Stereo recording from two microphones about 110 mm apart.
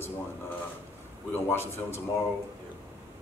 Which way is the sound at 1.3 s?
20° left (ahead or behind).